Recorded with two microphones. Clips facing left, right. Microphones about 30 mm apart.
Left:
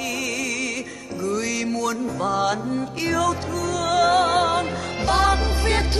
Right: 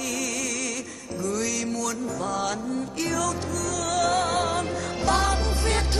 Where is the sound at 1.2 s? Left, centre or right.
Left.